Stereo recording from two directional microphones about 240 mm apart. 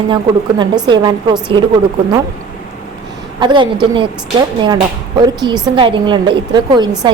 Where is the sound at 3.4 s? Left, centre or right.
Centre.